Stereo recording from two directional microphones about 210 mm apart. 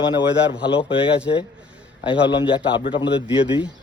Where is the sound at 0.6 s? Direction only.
25° left (ahead or behind).